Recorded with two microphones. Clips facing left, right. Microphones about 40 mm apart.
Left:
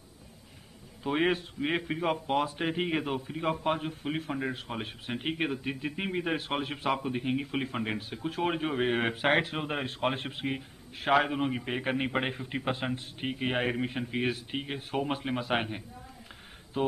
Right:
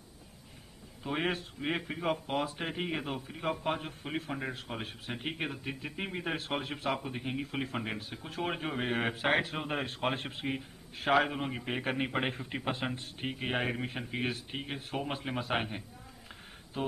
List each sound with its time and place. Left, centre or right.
1.0 s a man's voice: centre
9.1 s speech: left
9.4 s a man's voice: centre
16.8 s speech: centre